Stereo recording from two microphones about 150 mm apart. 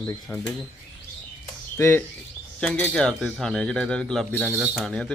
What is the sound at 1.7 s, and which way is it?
Speech, 15° left (ahead or behind).